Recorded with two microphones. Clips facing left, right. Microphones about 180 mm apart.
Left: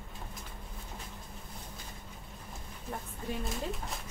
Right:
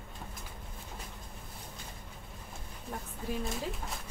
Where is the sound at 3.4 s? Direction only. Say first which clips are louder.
Even; centre (ahead or behind).